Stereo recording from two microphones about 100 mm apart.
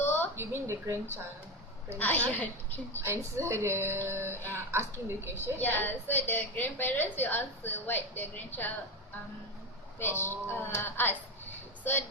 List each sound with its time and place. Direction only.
0.3 s a woman's voice: 25° right (ahead or behind)
2.0 s a woman's voice: 15° left (ahead or behind)
3.0 s a woman's voice: 30° right (ahead or behind)
5.5 s a woman's voice: 20° left (ahead or behind)
10.0 s a woman's voice: 20° left (ahead or behind)